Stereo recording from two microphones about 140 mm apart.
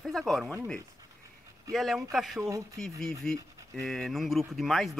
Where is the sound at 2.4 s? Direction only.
25° right (ahead or behind).